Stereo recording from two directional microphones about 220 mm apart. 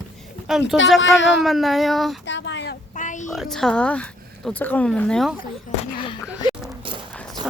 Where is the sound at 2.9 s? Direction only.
35° left (ahead or behind).